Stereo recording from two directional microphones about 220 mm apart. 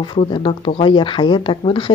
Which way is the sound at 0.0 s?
20° left (ahead or behind).